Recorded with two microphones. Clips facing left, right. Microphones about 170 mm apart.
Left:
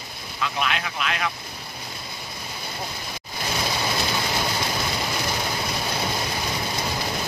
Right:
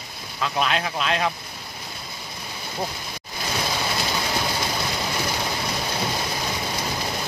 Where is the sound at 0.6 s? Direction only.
35° right (ahead or behind).